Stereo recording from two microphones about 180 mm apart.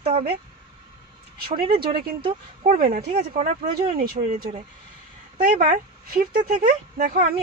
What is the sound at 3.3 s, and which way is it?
Speech, 40° right (ahead or behind).